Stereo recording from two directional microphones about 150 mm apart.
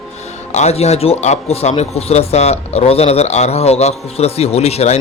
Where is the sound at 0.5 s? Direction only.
45° left (ahead or behind).